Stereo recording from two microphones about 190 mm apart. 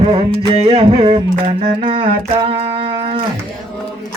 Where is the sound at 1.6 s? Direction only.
30° right (ahead or behind).